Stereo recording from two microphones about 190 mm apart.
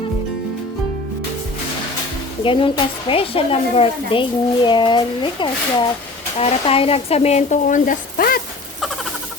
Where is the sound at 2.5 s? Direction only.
25° left (ahead or behind); by 8.4 s 50° left (ahead or behind).